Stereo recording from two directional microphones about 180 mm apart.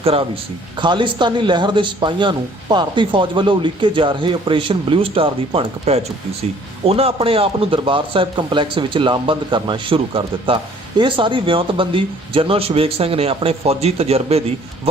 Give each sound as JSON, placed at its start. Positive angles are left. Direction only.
{"t": 0.0, "sound": "a man's voice", "side_deg": -30}